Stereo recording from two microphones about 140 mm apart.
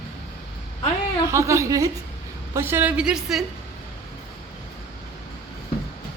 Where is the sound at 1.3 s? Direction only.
20° right (ahead or behind); by 3.5 s 5° right (ahead or behind).